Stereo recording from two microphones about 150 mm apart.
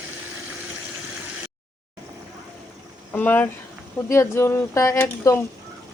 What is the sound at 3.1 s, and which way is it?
Speech, 10° left (ahead or behind).